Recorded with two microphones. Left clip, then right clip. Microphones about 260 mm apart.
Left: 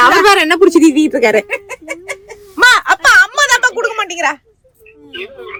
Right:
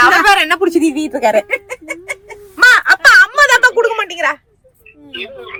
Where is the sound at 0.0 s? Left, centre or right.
Centre.